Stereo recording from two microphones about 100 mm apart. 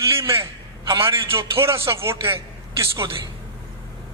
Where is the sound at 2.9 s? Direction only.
50° right (ahead or behind).